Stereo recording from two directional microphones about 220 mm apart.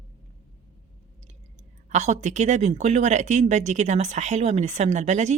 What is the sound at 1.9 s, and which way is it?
A woman's voice, 30° right (ahead or behind).